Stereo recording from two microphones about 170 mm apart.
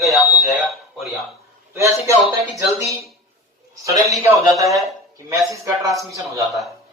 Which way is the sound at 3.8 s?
20° right (ahead or behind).